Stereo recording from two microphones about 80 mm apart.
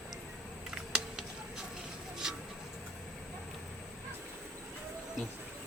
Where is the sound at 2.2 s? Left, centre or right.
Centre.